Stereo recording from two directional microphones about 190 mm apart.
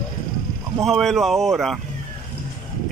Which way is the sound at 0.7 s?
Centre (ahead or behind).